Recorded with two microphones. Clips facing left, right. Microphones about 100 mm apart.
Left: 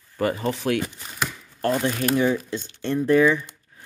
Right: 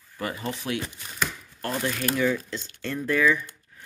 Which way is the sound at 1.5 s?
35° left (ahead or behind).